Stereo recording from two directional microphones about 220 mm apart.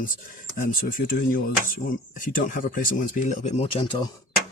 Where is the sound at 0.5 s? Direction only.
40° left (ahead or behind); by 4.1 s 20° left (ahead or behind).